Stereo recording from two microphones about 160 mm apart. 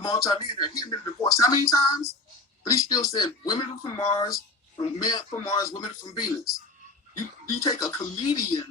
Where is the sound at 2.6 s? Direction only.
20° left (ahead or behind).